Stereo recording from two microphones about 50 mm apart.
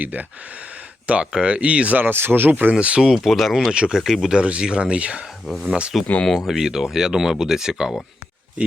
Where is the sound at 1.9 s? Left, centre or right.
Right.